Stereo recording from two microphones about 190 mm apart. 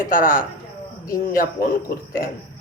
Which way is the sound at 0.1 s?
45° left (ahead or behind).